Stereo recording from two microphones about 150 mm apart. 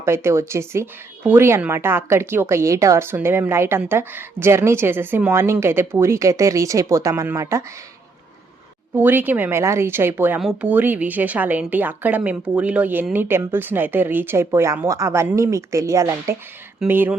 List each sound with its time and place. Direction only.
0.0 s speech: 15° right (ahead or behind)
9.0 s speech: 15° right (ahead or behind)